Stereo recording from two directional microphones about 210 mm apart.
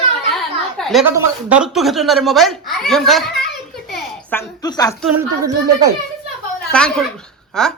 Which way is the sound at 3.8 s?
Centre (ahead or behind).